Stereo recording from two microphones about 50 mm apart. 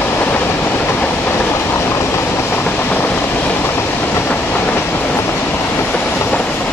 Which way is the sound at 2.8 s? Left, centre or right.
Left.